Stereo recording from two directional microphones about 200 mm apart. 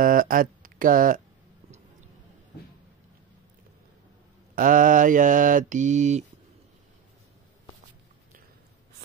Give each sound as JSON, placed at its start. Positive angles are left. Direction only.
{"t": 0.0, "sound": "speech", "side_deg": -45}
{"t": 4.6, "sound": "mantra", "side_deg": -40}